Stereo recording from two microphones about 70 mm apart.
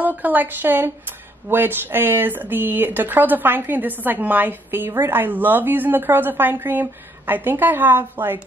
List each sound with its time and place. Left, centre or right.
0.0 s speech: right